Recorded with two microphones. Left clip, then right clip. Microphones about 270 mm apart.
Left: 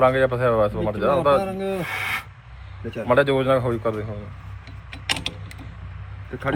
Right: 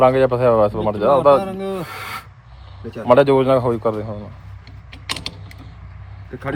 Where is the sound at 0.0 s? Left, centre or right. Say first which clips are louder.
Right 4 dB; centre.